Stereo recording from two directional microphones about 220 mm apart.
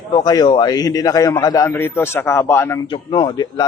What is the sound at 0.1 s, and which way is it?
A man's voice, 20° left (ahead or behind).